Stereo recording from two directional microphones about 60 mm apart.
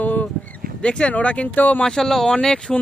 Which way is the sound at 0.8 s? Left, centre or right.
Centre.